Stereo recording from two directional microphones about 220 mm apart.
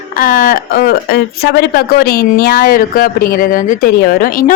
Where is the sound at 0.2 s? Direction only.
40° left (ahead or behind).